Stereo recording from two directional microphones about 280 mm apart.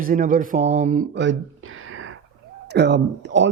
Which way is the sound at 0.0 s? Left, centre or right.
Right.